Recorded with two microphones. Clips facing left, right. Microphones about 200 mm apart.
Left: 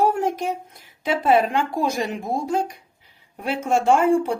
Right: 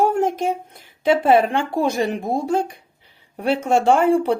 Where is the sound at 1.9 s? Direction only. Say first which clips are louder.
Right 4 dB; 60° right (ahead or behind).